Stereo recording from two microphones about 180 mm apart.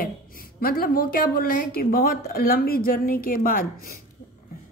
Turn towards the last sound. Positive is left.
turn(degrees=50)  # may be behind; listen again after turning